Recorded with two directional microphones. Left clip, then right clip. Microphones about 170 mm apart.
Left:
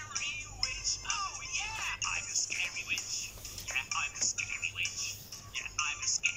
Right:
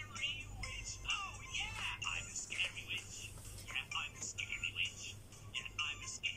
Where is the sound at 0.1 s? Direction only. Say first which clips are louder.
Left 5 dB; 15° right (ahead or behind).